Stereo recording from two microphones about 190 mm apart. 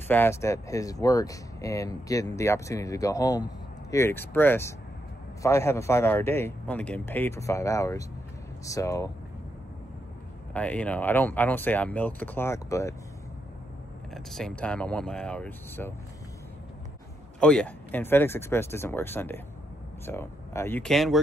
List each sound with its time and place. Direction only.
0.1 s speech: 10° left (ahead or behind)
10.5 s speech: 5° left (ahead or behind)
14.1 s speech: 5° left (ahead or behind)
17.4 s speech: 5° left (ahead or behind)